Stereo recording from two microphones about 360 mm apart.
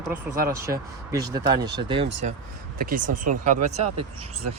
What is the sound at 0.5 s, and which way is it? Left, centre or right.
Speech, centre.